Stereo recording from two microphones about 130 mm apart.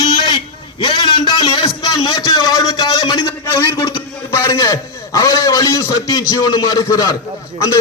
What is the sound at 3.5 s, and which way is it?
A man's voice, 25° left (ahead or behind).